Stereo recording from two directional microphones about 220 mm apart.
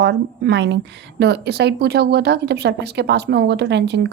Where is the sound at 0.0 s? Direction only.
50° right (ahead or behind).